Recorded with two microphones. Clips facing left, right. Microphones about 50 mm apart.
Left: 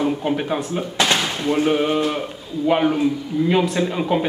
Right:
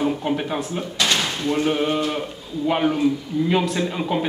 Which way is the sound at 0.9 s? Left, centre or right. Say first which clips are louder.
Left 2 dB; centre.